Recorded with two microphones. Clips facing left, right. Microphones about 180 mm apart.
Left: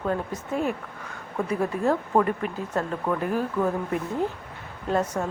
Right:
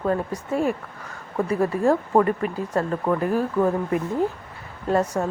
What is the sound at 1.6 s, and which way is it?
Speech, 10° right (ahead or behind).